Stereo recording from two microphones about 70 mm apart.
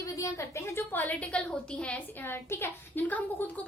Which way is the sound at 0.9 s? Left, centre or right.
Left.